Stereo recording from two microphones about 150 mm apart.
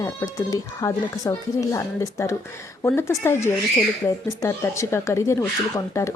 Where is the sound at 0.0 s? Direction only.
20° left (ahead or behind).